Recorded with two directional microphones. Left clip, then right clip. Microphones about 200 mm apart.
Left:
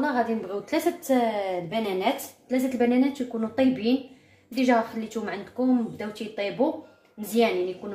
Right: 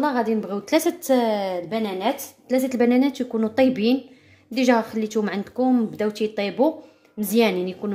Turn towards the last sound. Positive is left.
turn(degrees=-50)  # may be behind; listen again after turning